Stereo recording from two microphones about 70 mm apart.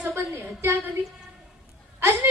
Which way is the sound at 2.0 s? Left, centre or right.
Right.